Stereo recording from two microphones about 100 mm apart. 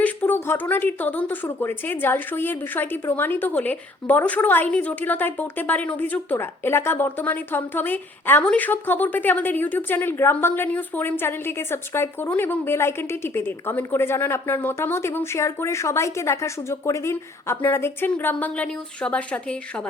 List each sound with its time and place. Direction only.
0.0 s speech: 15° left (ahead or behind)